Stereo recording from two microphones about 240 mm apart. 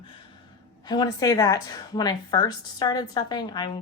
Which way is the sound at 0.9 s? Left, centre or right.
Centre.